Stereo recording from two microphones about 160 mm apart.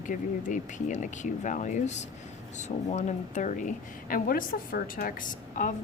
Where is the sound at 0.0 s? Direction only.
55° left (ahead or behind).